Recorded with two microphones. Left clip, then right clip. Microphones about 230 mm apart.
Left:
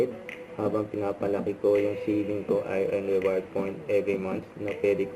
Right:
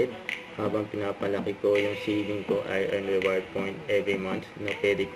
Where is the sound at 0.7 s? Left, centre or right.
Right.